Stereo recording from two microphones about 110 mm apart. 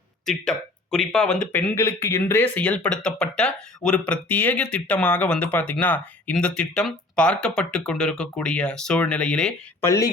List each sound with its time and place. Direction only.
0.3 s speech: centre (ahead or behind)
1.5 s speech: 25° left (ahead or behind); by 9.6 s 10° left (ahead or behind)
9.8 s speech: 30° left (ahead or behind)